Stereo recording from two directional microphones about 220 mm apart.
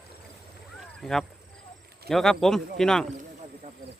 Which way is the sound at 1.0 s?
Centre (ahead or behind).